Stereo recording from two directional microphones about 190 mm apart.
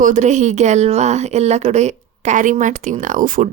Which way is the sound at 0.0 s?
40° right (ahead or behind).